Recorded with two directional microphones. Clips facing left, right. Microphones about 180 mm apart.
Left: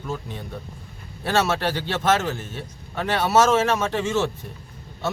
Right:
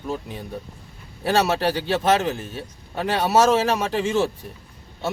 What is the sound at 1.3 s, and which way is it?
Speech, 35° right (ahead or behind).